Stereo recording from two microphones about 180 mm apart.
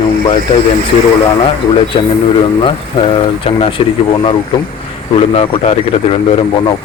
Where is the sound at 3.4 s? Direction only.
30° left (ahead or behind).